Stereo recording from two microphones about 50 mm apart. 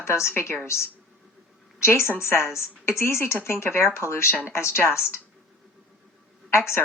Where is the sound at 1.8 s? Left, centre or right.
Left.